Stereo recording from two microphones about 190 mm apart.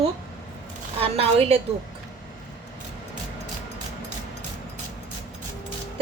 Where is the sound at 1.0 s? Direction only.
30° right (ahead or behind).